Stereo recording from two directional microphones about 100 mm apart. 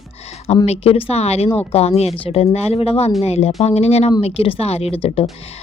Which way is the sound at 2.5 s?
85° left.